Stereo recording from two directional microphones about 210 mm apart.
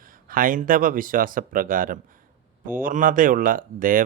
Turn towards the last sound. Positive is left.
turn(degrees=-40)  # may be behind; listen again after turning